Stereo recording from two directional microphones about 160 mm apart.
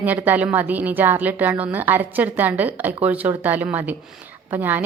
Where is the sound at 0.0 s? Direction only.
10° right (ahead or behind).